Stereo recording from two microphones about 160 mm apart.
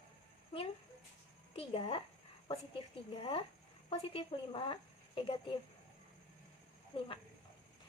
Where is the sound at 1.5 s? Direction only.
35° left (ahead or behind).